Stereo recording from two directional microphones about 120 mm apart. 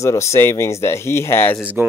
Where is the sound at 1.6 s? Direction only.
15° right (ahead or behind).